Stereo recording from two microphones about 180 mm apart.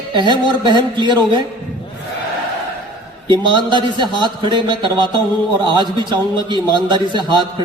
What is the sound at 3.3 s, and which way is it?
A man's voice, 25° right (ahead or behind).